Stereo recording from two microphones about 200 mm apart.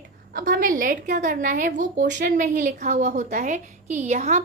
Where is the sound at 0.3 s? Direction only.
45° right (ahead or behind).